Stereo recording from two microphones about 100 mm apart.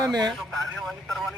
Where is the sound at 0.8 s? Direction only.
Centre (ahead or behind).